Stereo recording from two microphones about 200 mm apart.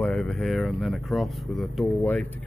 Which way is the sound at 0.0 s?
5° left (ahead or behind).